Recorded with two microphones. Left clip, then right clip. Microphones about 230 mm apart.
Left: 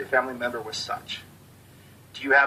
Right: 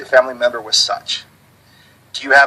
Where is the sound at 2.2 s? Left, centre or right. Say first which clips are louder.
Right 9 dB; centre.